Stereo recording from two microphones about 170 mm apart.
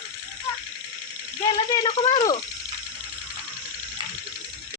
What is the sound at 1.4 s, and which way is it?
Speech, 25° left (ahead or behind).